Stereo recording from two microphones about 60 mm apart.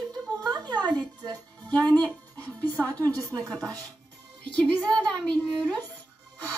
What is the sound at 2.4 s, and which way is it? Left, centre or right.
Music, left.